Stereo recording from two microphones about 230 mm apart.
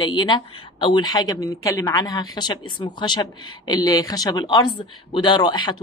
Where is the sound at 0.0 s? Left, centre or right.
Left.